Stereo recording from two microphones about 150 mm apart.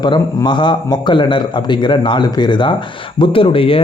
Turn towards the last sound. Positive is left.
turn(degrees=35)  # may be behind; listen again after turning